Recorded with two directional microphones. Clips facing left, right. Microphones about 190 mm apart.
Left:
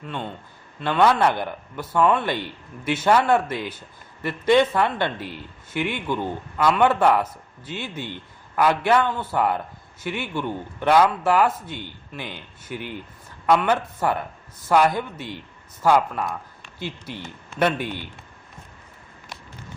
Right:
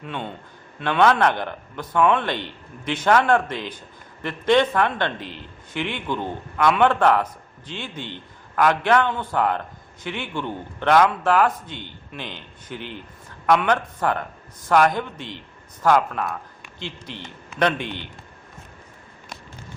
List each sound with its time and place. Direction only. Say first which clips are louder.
0.0 s a man's voice: even; centre (ahead or behind)